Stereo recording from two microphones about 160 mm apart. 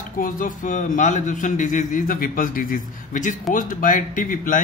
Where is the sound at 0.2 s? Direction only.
55° left (ahead or behind).